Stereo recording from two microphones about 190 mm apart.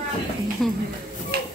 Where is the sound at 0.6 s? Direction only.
Centre (ahead or behind).